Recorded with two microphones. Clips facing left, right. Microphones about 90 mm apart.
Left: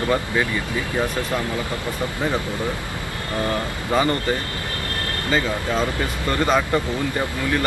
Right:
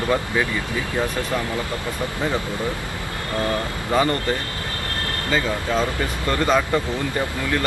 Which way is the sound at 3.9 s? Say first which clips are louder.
Even; centre (ahead or behind).